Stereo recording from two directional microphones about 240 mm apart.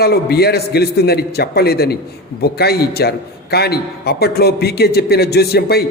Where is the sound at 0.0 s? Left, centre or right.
Left.